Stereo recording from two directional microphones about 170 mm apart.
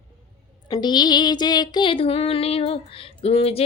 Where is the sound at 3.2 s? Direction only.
35° left (ahead or behind).